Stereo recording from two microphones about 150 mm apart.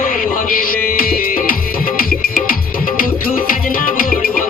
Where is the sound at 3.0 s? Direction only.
70° left (ahead or behind).